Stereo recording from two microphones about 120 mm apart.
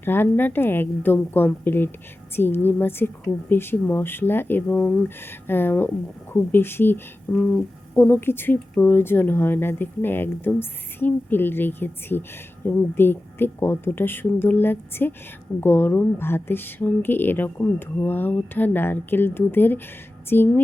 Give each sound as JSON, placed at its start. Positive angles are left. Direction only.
{"t": 0.0, "sound": "speech", "side_deg": 20}